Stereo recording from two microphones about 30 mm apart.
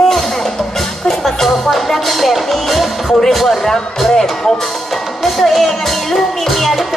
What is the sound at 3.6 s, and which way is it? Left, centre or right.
Speech, centre.